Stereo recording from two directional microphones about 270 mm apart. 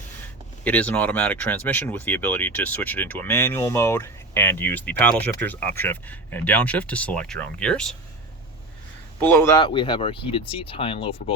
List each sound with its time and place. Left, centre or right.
0.6 s speech: centre
9.2 s speech: centre